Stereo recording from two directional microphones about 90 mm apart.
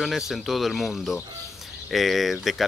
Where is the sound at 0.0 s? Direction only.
Centre (ahead or behind).